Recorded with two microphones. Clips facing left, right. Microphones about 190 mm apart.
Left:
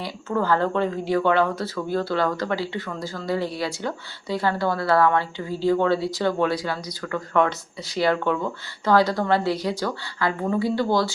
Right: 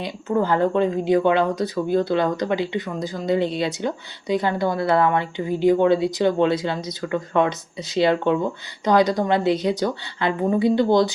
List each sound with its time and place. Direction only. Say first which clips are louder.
0.0 s speech: right 3 dB; 20° right (ahead or behind)